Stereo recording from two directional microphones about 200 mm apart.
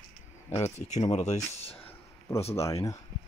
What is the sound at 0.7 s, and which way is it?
Speech, 35° left (ahead or behind).